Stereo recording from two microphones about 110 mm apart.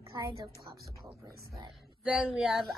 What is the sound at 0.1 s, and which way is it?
Speech, 35° right (ahead or behind).